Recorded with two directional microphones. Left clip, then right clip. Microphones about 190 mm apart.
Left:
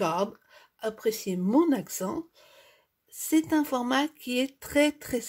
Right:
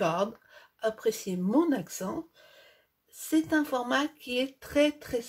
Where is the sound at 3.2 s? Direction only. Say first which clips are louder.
Left 2 dB; 50° left (ahead or behind).